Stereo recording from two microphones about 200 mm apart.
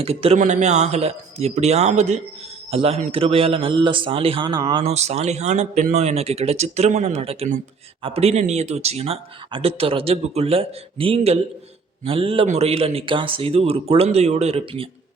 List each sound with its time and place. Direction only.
0.0 s a man's voice: 30° right (ahead or behind)